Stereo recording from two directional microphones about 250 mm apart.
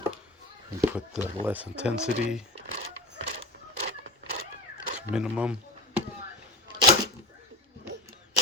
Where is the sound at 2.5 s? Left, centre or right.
Right.